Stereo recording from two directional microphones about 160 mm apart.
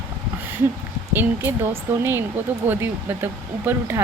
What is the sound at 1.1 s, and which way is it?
Speech, 10° right (ahead or behind).